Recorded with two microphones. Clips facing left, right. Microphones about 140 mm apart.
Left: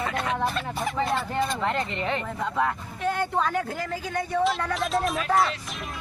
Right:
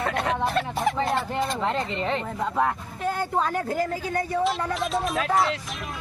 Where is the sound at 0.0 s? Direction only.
65° right (ahead or behind).